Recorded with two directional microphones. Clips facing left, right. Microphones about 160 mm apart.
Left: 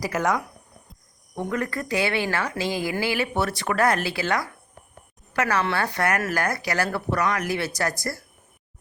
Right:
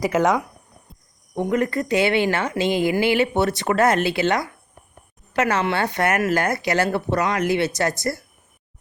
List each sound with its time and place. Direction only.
0.0 s speech: 20° right (ahead or behind)